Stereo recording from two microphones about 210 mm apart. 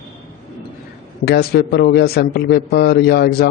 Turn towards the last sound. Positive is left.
turn(degrees=50)  # may be behind; listen again after turning